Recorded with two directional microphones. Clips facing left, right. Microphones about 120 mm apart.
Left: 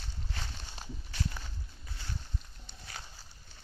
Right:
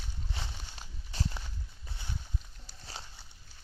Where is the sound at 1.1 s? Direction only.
25° right (ahead or behind).